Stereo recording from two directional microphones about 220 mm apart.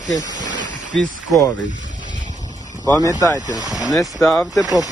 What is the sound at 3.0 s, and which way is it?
Speech, 15° left (ahead or behind).